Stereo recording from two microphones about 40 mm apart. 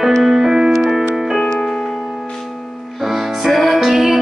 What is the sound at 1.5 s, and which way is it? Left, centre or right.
Piano, centre.